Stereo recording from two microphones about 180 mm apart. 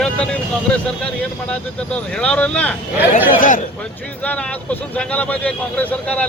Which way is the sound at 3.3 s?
45° left (ahead or behind).